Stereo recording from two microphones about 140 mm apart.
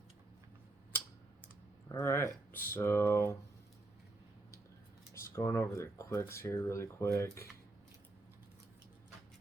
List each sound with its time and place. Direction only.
1.9 s speech: 20° left (ahead or behind)
5.1 s speech: 20° left (ahead or behind)